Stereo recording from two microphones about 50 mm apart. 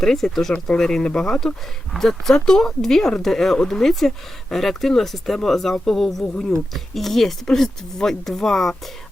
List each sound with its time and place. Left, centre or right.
0.0 s speech: centre
6.2 s speech: left
6.7 s speech: centre